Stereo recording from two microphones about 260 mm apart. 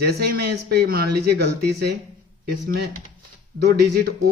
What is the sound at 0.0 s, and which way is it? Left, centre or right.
Speech, right.